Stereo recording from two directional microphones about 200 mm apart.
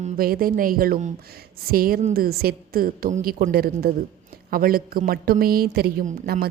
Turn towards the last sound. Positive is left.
turn(degrees=-45)  # may be behind; listen again after turning